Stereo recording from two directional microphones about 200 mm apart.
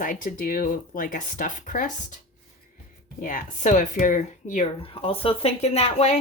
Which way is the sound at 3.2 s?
35° left (ahead or behind).